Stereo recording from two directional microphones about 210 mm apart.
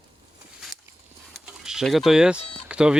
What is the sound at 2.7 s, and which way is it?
Speech, 5° right (ahead or behind).